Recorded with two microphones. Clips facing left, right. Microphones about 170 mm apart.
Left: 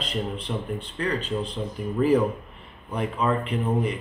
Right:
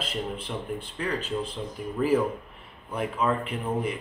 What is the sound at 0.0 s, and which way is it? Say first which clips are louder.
Speech: left 2 dB; 5° right (ahead or behind).